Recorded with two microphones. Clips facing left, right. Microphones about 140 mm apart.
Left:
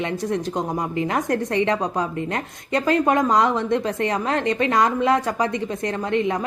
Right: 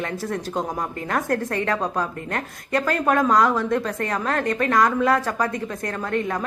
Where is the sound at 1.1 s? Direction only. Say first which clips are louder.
Right 2 dB; 20° left (ahead or behind).